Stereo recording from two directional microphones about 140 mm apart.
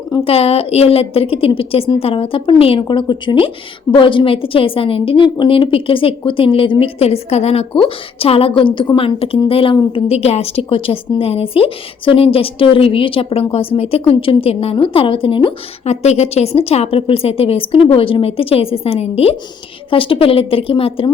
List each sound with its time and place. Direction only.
0.3 s a woman's voice: 45° left (ahead or behind)